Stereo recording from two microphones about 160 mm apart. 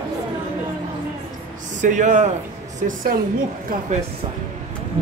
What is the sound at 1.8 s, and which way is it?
A woman's voice, 50° right (ahead or behind).